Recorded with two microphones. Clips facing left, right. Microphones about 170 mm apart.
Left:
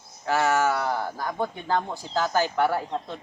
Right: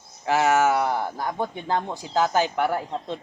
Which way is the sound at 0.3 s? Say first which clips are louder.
Right 3 dB; 20° right (ahead or behind).